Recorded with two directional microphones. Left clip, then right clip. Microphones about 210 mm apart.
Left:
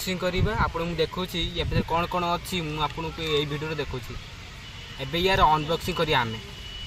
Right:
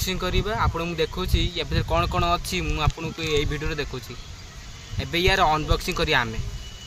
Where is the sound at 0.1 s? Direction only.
10° right (ahead or behind).